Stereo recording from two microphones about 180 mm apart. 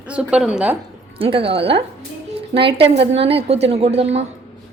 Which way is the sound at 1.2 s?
30° right (ahead or behind).